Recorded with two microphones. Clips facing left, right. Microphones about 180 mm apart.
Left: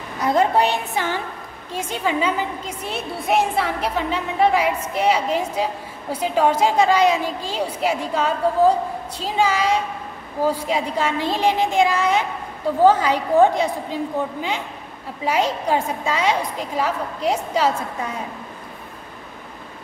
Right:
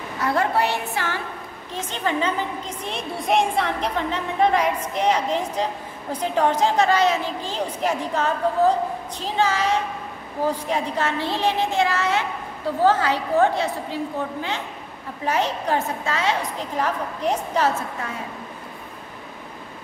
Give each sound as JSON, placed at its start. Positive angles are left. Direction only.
{"t": 0.2, "sound": "a woman's voice", "side_deg": 20}
{"t": 15.2, "sound": "a woman's voice", "side_deg": 10}